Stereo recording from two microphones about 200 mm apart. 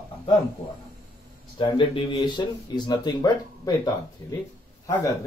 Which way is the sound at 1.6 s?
25° left (ahead or behind).